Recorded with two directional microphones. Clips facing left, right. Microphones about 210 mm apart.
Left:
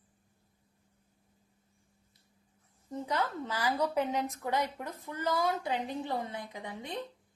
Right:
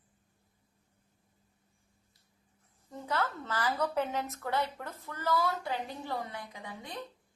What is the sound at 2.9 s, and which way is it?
A woman's voice, 15° left (ahead or behind).